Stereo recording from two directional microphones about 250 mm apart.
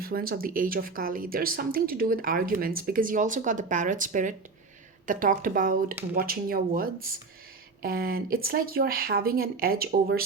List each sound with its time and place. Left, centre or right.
0.0 s speech: right